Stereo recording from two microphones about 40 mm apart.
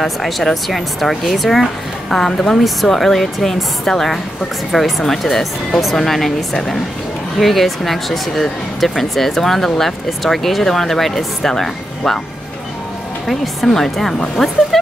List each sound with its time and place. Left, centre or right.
0.0 s speech: centre
2.6 s speech: centre
13.7 s speech: centre
14.7 s speech: centre